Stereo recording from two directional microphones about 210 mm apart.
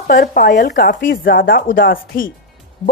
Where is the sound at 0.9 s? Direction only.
40° left (ahead or behind).